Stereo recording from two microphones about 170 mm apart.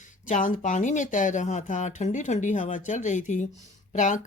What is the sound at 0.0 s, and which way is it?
A woman's voice, 50° left (ahead or behind).